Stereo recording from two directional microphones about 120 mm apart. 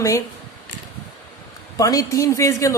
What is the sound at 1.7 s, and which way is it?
Speech, 30° left (ahead or behind).